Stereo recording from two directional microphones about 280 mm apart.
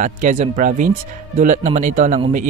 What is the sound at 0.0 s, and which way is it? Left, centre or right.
A man's voice, right.